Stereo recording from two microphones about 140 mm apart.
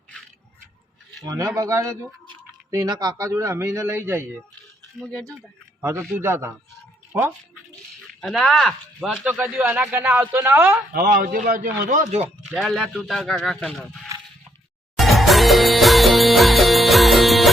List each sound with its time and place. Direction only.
1.2 s a man's voice: 25° right (ahead or behind)
4.9 s speech: 5° left (ahead or behind)
5.8 s speech: 15° right (ahead or behind)
8.2 s speech: centre (ahead or behind); by 10.8 s 15° right (ahead or behind)
10.9 s a man's voice: 80° right; by 12.3 s 60° right (ahead or behind)
12.5 s speech: centre (ahead or behind)
14.9 s music: centre (ahead or behind)